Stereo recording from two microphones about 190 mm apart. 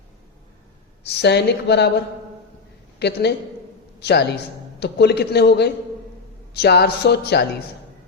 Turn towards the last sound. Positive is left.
turn(degrees=60)  # may be behind; listen again after turning